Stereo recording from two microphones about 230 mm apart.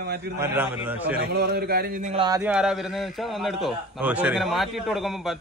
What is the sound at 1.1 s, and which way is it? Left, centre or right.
A man's voice, right.